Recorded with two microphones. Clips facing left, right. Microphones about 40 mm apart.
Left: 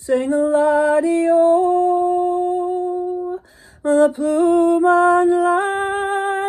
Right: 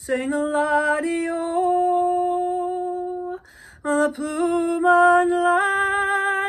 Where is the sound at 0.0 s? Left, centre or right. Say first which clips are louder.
Left 6 dB; right.